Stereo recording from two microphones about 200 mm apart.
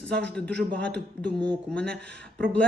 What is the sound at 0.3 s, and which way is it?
Speech, 5° left (ahead or behind).